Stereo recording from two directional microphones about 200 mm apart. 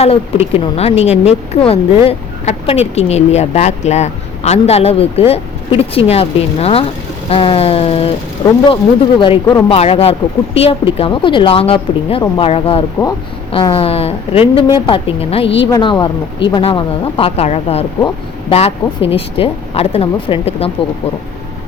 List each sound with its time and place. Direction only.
0.0 s speech: 30° left (ahead or behind)